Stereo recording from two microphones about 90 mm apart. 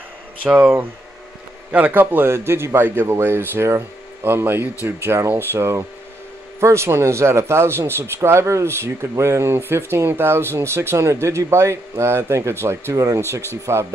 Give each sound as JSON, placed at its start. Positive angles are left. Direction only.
{"t": 0.4, "sound": "a man's voice", "side_deg": -15}